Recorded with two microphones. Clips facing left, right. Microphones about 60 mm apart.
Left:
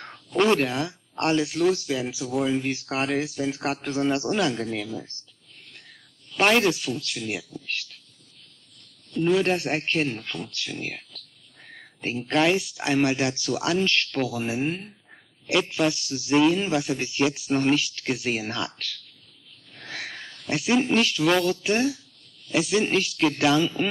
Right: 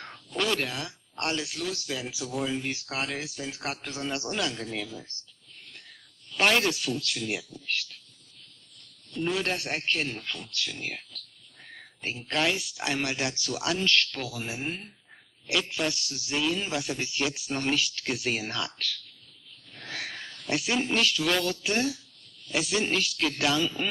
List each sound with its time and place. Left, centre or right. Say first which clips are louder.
0.0 s a sound: left 5 dB; centre
0.4 s a man's voice: left 8 dB; left
9.3 s a man's voice: left 8 dB; centre